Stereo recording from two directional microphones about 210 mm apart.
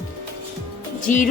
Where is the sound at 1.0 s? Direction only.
40° left (ahead or behind).